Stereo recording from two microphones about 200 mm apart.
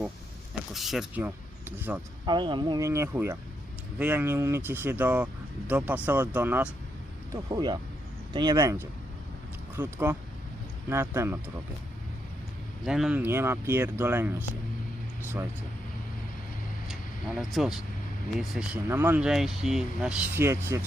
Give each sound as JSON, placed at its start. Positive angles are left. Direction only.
{"t": 0.7, "sound": "speech", "side_deg": 0}
{"t": 2.2, "sound": "speech", "side_deg": -20}
{"t": 7.5, "sound": "speech", "side_deg": -20}
{"t": 12.8, "sound": "speech", "side_deg": 0}
{"t": 13.1, "sound": "speech", "side_deg": -10}
{"t": 16.9, "sound": "speech", "side_deg": 0}